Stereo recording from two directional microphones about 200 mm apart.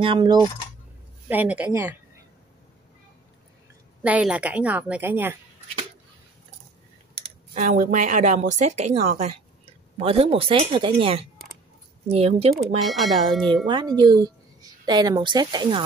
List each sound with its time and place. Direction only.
0.0 s a woman's voice: 25° right (ahead or behind)
1.3 s a woman's voice: 10° right (ahead or behind)
4.0 s a woman's voice: 5° right (ahead or behind)
7.2 s a woman's voice: 35° right (ahead or behind)
12.8 s speech: centre (ahead or behind)
13.7 s a woman's voice: 20° right (ahead or behind)